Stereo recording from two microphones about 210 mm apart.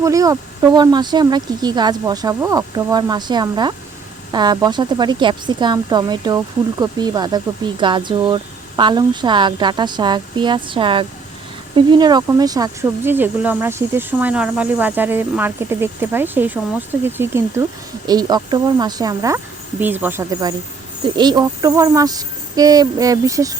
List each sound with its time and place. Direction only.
0.0 s speech: 15° right (ahead or behind)